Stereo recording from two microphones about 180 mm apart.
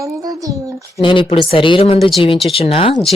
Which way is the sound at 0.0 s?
20° right (ahead or behind).